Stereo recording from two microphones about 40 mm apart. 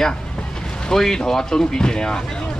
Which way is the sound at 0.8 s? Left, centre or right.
Centre.